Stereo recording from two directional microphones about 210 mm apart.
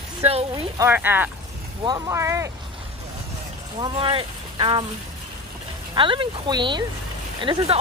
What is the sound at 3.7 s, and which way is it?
Speech, 25° right (ahead or behind).